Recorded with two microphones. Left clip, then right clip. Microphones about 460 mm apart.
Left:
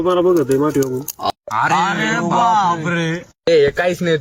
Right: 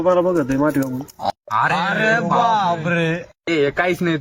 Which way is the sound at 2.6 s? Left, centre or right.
Right.